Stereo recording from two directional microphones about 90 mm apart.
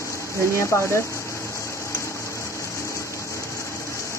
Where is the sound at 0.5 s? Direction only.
30° left (ahead or behind).